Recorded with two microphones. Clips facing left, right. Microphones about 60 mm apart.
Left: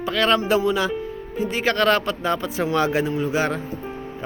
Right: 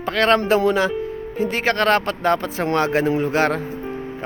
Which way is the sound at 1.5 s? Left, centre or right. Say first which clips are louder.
Right 1 dB; right.